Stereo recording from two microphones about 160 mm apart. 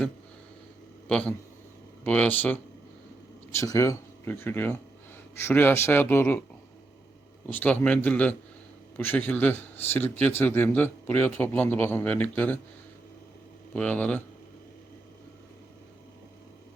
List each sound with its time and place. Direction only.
1.0 s a man's voice: 5° left (ahead or behind)
7.5 s a man's voice: 10° left (ahead or behind)
13.7 s a man's voice: 10° left (ahead or behind)